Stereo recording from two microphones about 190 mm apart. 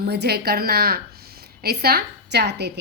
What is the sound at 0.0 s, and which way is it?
A woman's voice, 55° right (ahead or behind).